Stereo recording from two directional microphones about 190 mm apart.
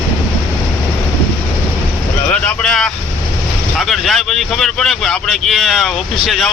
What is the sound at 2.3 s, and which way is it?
Speech, 5° left (ahead or behind).